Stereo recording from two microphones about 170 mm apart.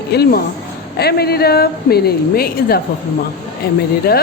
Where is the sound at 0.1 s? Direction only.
65° left (ahead or behind).